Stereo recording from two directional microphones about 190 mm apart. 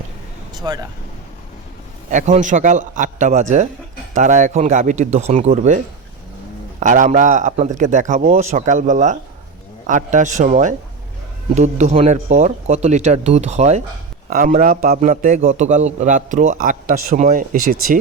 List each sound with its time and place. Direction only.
0.5 s speech: 20° right (ahead or behind)
2.0 s a man's voice: 40° right (ahead or behind)